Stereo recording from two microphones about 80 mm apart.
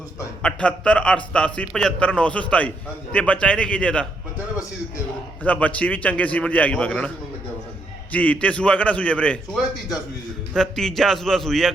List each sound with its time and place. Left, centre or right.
0.4 s a man's voice: centre
5.4 s a man's voice: centre
8.1 s a man's voice: centre
10.5 s a man's voice: centre